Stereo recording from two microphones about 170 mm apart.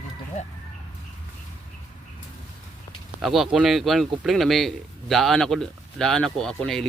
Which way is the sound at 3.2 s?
Centre (ahead or behind).